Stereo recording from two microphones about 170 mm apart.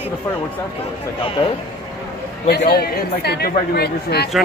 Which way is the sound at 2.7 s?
70° left (ahead or behind).